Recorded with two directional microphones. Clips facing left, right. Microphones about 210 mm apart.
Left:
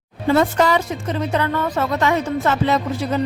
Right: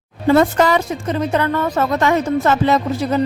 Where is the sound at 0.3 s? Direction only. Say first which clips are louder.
Right 2 dB; 50° right (ahead or behind).